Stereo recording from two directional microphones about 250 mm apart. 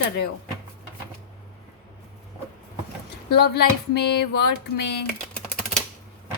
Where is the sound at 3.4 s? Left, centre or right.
Left.